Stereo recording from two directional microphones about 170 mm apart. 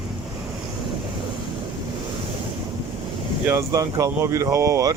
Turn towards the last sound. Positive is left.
turn(degrees=-15)  # may be behind; listen again after turning